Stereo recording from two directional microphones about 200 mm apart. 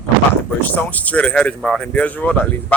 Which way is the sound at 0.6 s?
5° left (ahead or behind).